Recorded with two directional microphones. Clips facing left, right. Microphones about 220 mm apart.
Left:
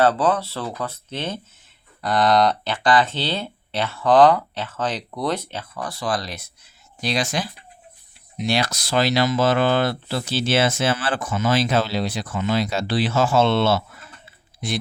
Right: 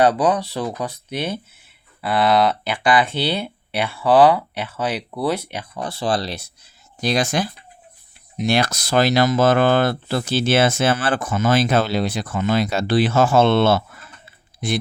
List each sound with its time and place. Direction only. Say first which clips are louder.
0.0 s speech: right 2 dB; 15° right (ahead or behind); by 6.5 s 30° right (ahead or behind)
7.0 s speech: right 4 dB; 50° right (ahead or behind)